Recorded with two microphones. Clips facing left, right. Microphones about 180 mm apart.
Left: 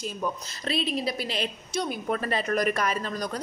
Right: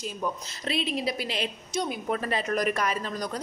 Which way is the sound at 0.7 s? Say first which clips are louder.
Left 1 dB; 15° right (ahead or behind).